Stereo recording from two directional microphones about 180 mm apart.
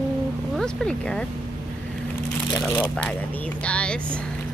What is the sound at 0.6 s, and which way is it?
Speech, 5° left (ahead or behind).